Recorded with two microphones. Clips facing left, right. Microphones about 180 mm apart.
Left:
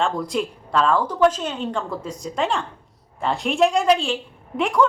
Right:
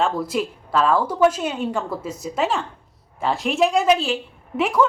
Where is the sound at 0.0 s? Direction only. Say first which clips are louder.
Right 1 dB; 5° right (ahead or behind).